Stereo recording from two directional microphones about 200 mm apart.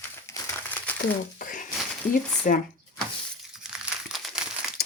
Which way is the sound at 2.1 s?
45° left (ahead or behind).